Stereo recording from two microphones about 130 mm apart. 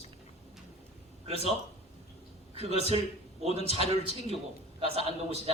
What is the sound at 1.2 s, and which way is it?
Speech, 50° right (ahead or behind).